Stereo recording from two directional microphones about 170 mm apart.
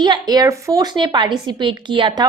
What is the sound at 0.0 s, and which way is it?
Speech, 25° right (ahead or behind).